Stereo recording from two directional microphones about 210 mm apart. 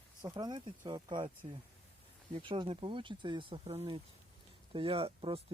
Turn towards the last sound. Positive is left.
turn(degrees=-25)  # may be behind; listen again after turning